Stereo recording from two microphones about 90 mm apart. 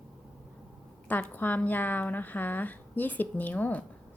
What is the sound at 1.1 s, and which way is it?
A woman's voice, 20° left (ahead or behind).